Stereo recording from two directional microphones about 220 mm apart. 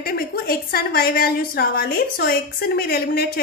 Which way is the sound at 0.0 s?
45° left (ahead or behind).